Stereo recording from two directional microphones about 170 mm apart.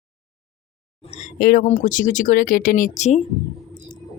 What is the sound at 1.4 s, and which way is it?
Speech, 60° left (ahead or behind).